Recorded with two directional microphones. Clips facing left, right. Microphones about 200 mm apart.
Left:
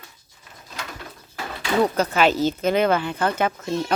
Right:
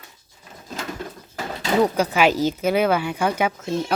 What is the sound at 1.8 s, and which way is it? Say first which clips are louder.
Speech: even; 10° right (ahead or behind).